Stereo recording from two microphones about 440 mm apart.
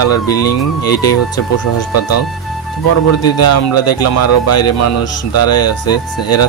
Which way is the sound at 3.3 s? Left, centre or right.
Left.